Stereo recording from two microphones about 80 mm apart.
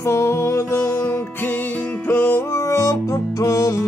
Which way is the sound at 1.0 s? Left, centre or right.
Left.